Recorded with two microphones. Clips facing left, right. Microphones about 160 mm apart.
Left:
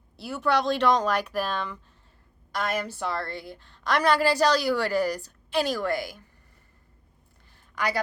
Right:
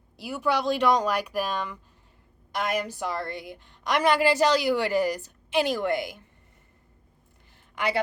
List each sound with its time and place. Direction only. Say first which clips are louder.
0.2 s a woman's voice: left 1 dB; 10° right (ahead or behind)
7.8 s a woman's voice: right 1 dB; 25° right (ahead or behind)